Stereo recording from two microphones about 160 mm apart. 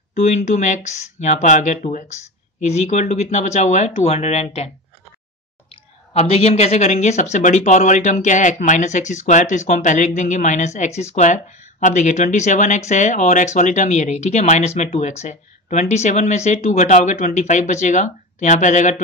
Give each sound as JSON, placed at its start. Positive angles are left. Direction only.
{"t": 0.1, "sound": "speech", "side_deg": 45}
{"t": 5.7, "sound": "speech", "side_deg": 40}